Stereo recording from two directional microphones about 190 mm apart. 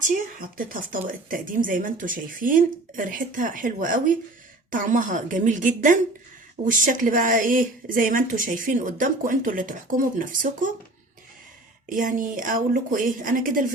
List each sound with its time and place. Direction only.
0.1 s speech: 45° right (ahead or behind)
11.9 s speech: 45° right (ahead or behind)